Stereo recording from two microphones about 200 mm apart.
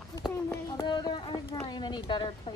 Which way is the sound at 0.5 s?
20° left (ahead or behind).